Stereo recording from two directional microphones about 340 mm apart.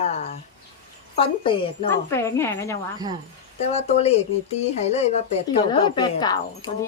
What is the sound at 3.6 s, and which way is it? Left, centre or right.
Speech, centre.